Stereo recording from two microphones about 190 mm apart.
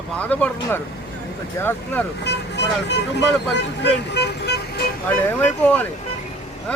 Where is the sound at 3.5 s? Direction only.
65° left (ahead or behind).